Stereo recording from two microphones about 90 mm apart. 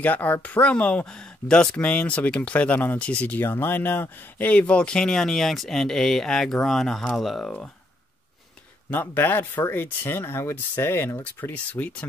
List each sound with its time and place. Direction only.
0.0 s speech: 20° left (ahead or behind); by 7.5 s centre (ahead or behind)
8.9 s speech: 25° left (ahead or behind)
11.5 s speech: 15° left (ahead or behind)